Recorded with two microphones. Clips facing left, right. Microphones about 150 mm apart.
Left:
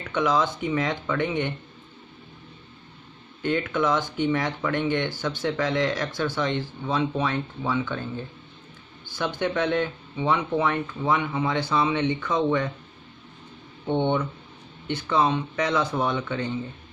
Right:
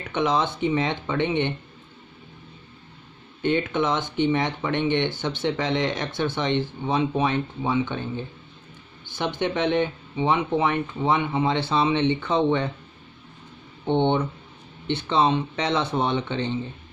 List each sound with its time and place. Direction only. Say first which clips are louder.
0.1 s speech: even; 25° right (ahead or behind)
3.4 s speech: right 1 dB; 25° right (ahead or behind)
13.8 s speech: right 2 dB; 25° right (ahead or behind)